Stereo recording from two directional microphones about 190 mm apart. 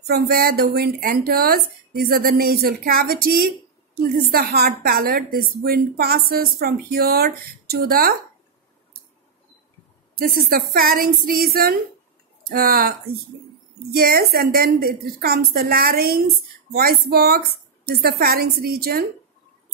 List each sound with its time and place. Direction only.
0.0 s a woman's voice: 55° right (ahead or behind)
10.1 s a woman's voice: 50° right (ahead or behind)
16.7 s a sound: 55° right (ahead or behind)
17.8 s a woman's voice: 50° right (ahead or behind)